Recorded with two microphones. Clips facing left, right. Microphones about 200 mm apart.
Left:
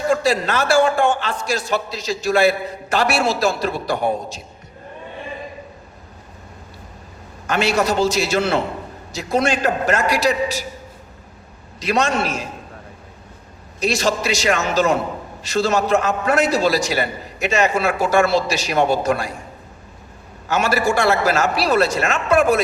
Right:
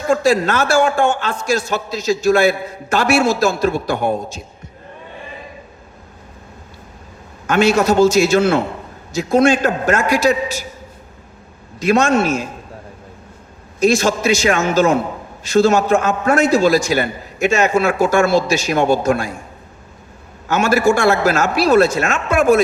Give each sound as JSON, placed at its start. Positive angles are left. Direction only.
{"t": 0.1, "sound": "a man's voice", "side_deg": -45}
{"t": 7.4, "sound": "a man's voice", "side_deg": -45}
{"t": 11.8, "sound": "a man's voice", "side_deg": -50}
{"t": 13.7, "sound": "a man's voice", "side_deg": -50}
{"t": 20.5, "sound": "a man's voice", "side_deg": -45}